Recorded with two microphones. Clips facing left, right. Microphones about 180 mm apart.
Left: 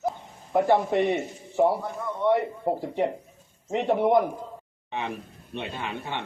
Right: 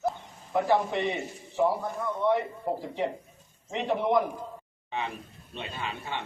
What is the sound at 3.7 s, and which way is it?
Speech, 50° left (ahead or behind).